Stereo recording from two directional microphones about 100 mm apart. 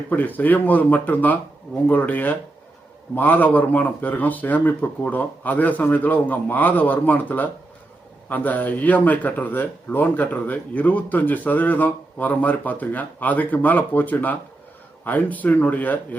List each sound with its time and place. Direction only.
0.1 s speech: 15° left (ahead or behind)